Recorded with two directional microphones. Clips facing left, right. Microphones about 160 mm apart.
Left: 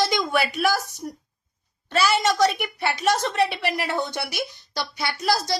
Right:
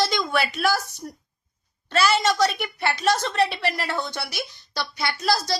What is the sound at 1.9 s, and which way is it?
A woman's voice, 15° left (ahead or behind).